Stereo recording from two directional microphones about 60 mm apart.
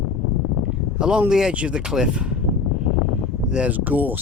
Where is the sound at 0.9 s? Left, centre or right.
Centre.